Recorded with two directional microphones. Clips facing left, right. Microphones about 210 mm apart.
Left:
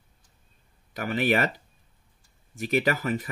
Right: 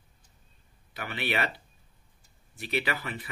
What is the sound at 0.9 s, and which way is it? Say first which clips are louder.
Speech: left 7 dB; 45° left (ahead or behind).